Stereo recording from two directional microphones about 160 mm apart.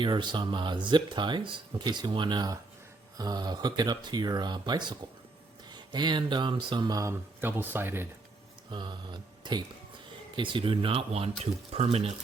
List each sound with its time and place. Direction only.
0.0 s speech: 30° right (ahead or behind); by 8.0 s 15° right (ahead or behind)
8.7 s speech: 30° right (ahead or behind)